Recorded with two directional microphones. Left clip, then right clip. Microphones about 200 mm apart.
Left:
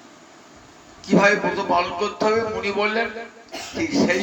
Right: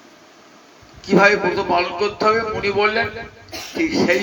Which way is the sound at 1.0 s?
45° right (ahead or behind).